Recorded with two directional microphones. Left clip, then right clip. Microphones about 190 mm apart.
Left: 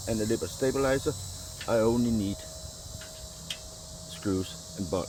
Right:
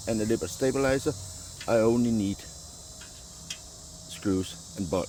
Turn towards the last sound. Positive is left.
turn(degrees=-40)  # may be behind; listen again after turning